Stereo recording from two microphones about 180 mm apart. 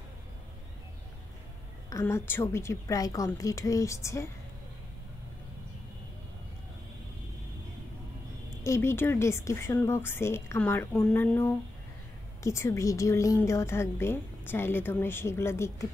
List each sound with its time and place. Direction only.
1.9 s a woman's voice: 15° left (ahead or behind)
8.6 s a woman's voice: 15° left (ahead or behind)